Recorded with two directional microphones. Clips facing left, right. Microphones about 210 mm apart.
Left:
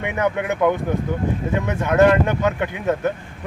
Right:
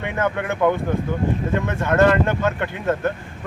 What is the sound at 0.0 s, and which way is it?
Speech, 15° left (ahead or behind).